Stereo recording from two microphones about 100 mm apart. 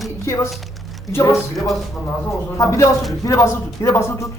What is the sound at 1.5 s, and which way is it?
Speech, centre (ahead or behind).